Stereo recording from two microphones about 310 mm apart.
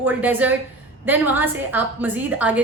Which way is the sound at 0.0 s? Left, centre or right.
Centre.